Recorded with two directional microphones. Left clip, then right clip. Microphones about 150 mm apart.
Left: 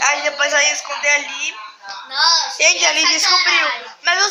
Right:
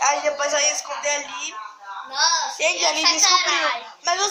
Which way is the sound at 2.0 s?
60° right (ahead or behind).